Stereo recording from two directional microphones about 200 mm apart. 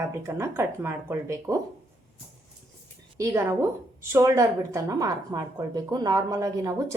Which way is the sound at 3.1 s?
15° right (ahead or behind).